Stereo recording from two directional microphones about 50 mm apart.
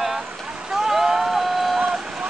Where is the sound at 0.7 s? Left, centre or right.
Centre.